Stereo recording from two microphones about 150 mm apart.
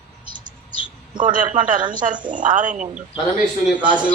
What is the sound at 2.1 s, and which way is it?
Speech, 30° right (ahead or behind).